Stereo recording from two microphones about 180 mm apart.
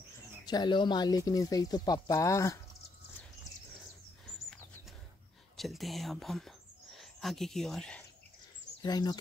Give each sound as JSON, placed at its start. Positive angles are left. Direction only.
{"t": 0.5, "sound": "speech", "side_deg": 25}
{"t": 5.6, "sound": "speech", "side_deg": 0}
{"t": 8.8, "sound": "speech", "side_deg": 20}